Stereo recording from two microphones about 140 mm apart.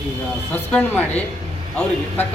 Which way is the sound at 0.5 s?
15° left (ahead or behind).